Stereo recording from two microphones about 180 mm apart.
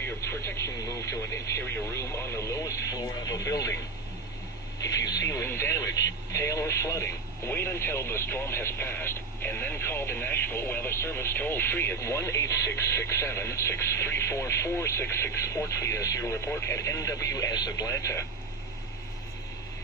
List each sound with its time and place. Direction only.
0.0 s speech: 15° left (ahead or behind)
4.8 s speech: 20° left (ahead or behind)